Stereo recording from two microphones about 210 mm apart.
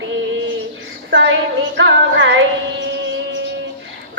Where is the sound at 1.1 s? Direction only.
60° right (ahead or behind).